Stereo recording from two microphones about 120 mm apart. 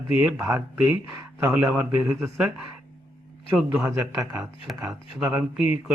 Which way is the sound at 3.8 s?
25° right (ahead or behind).